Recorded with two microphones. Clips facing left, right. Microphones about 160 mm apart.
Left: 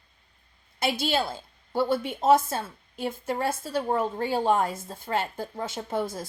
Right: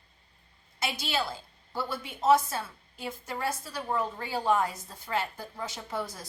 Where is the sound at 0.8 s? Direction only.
30° left (ahead or behind).